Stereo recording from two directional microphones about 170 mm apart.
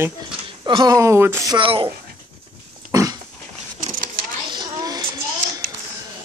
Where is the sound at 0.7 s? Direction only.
25° right (ahead or behind).